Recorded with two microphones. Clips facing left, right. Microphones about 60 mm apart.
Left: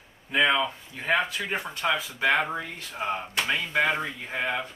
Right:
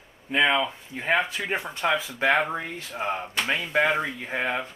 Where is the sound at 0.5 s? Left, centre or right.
Right.